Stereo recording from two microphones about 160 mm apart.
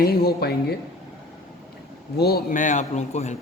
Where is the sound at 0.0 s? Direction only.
75° left (ahead or behind).